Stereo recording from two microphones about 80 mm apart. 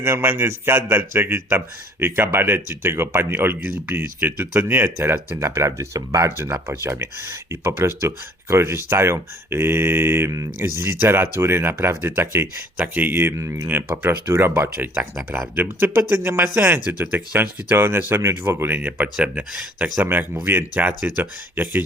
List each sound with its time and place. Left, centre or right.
0.0 s speech: right
20.0 s speech: right